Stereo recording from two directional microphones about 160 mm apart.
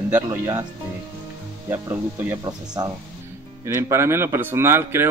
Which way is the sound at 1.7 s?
15° right (ahead or behind).